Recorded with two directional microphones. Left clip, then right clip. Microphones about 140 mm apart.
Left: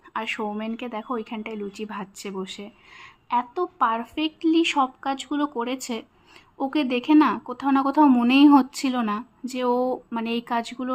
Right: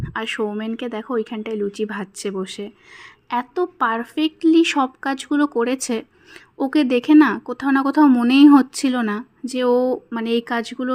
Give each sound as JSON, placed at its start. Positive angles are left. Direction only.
{"t": 0.0, "sound": "speech", "side_deg": -25}